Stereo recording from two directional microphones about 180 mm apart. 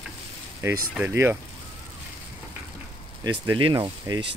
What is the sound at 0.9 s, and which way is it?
Speech, 10° right (ahead or behind).